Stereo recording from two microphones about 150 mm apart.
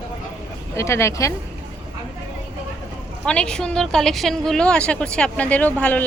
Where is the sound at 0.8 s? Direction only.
20° left (ahead or behind).